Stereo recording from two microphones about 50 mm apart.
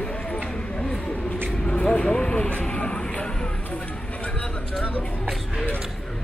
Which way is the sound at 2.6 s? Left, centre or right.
Centre.